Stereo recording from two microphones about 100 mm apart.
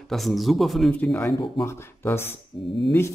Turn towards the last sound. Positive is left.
turn(degrees=25)  # may be behind; listen again after turning